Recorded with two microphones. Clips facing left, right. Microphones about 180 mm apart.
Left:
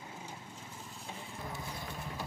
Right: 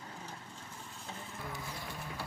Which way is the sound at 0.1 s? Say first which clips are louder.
Even; 10° left (ahead or behind).